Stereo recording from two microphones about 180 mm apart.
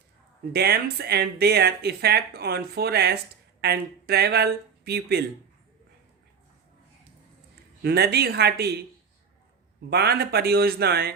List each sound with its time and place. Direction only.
0.5 s speech: 60° right (ahead or behind)
7.8 s speech: 60° right (ahead or behind)
9.9 s speech: 65° right (ahead or behind)